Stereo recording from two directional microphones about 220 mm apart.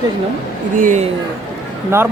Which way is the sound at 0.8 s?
35° right (ahead or behind).